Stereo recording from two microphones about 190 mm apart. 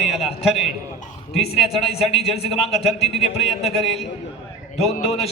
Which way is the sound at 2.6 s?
30° left (ahead or behind).